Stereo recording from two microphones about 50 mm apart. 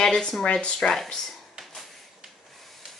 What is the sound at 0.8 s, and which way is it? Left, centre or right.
Speech, centre.